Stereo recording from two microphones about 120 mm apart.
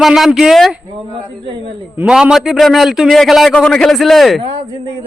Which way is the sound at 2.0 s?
5° right (ahead or behind).